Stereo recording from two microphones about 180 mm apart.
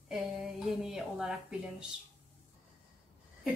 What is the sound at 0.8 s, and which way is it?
Speech, 5° right (ahead or behind).